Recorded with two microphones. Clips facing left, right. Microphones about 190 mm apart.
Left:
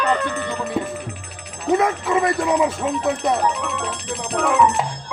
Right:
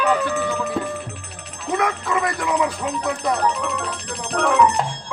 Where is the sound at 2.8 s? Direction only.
5° left (ahead or behind).